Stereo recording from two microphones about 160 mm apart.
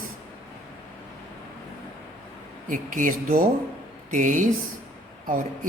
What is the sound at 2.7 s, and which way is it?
Speech, 55° right (ahead or behind).